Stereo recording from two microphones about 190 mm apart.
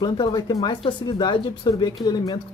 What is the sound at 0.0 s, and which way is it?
Speech, 20° left (ahead or behind).